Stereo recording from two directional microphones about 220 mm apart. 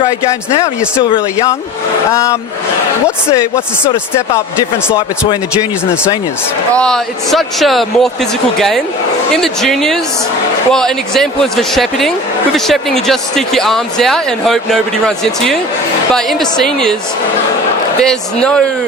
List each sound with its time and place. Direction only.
0.9 s speech: 15° left (ahead or behind)
4.1 s speech: 10° left (ahead or behind)
6.7 s speech: 5° left (ahead or behind)
18.0 s speech: 5° left (ahead or behind)